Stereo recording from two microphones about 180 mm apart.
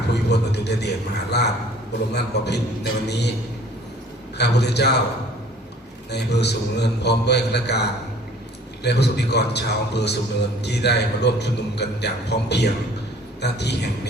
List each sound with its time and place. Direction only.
0.1 s a man's voice: 70° left (ahead or behind)
4.4 s a man's voice: 70° left (ahead or behind)
6.1 s a man's voice: 70° left (ahead or behind)